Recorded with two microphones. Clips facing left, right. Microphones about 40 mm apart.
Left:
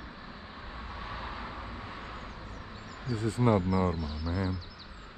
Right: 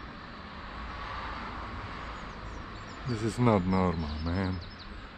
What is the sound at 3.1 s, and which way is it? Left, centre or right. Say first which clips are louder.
Speech: even; left.